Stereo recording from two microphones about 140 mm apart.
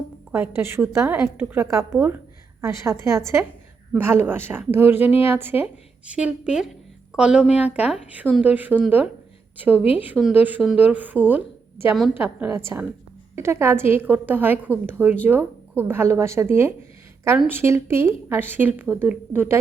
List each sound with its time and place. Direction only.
0.3 s a woman's voice: 15° right (ahead or behind)
10.2 s a woman's voice: centre (ahead or behind)